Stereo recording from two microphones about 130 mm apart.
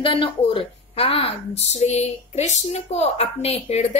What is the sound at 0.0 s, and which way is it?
A woman's voice, 40° left (ahead or behind).